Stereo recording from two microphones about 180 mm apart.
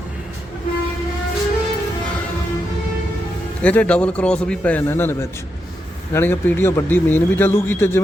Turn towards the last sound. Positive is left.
turn(degrees=15)  # may be behind; listen again after turning